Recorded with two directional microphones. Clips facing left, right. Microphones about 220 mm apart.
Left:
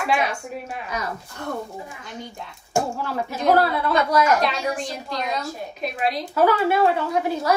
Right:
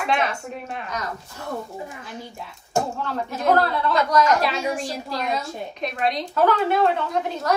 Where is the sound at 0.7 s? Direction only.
5° left (ahead or behind).